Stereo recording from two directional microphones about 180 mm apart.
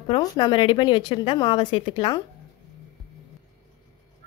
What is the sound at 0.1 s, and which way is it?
A woman's voice, 25° left (ahead or behind).